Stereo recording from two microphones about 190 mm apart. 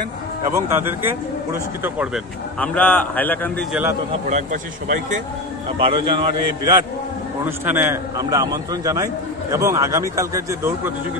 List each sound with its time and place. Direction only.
0.6 s a man's voice: 15° right (ahead or behind)
2.6 s a man's voice: 10° left (ahead or behind)
4.3 s speech: 40° right (ahead or behind)
5.8 s a man's voice: 25° right (ahead or behind)